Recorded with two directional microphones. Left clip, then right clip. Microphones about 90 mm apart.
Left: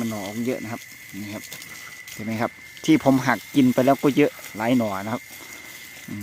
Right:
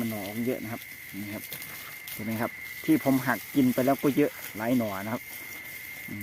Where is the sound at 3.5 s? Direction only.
80° left.